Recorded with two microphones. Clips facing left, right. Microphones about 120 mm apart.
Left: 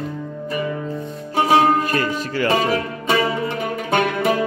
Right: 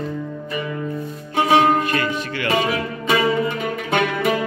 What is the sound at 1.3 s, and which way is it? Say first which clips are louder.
Music: even; 35° left (ahead or behind).